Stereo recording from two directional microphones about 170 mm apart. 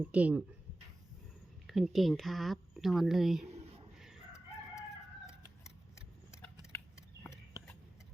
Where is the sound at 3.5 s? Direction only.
40° right (ahead or behind).